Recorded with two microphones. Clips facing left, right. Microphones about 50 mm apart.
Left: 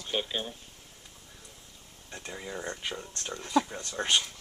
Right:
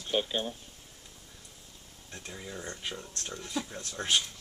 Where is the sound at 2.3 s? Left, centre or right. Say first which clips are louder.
Left 4 dB; centre.